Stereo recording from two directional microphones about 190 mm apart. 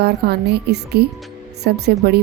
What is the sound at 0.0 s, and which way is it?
A woman's voice, 60° right (ahead or behind).